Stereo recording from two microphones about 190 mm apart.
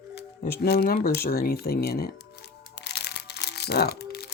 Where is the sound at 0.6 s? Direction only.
55° left (ahead or behind).